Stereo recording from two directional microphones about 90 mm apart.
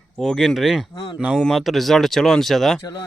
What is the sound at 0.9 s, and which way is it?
Speech, 70° left (ahead or behind).